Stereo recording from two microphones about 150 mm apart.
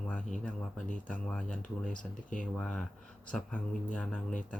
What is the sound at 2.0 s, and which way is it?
Speech, 60° left (ahead or behind).